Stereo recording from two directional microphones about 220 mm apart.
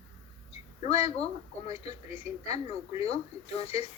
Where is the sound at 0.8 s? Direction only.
25° left (ahead or behind).